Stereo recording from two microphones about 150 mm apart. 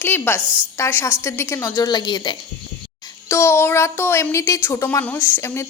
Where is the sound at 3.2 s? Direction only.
15° left (ahead or behind).